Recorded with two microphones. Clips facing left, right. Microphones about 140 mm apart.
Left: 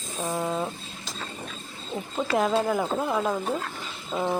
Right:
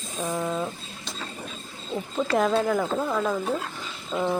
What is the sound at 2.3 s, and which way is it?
Speech, 5° left (ahead or behind).